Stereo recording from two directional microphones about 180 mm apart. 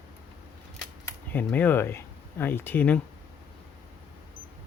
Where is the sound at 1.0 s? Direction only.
10° left (ahead or behind).